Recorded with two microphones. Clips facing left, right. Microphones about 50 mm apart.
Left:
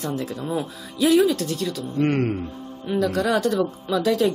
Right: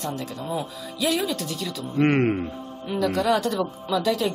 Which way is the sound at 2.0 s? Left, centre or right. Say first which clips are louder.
Right 2 dB; right.